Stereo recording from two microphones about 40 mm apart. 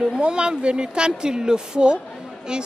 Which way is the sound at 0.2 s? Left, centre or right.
Right.